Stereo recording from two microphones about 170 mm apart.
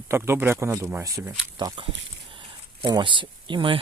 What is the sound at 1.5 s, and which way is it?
Speech, 30° right (ahead or behind).